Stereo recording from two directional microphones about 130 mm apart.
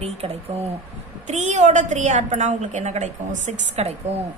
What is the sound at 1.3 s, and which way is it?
A woman's voice, 65° right (ahead or behind).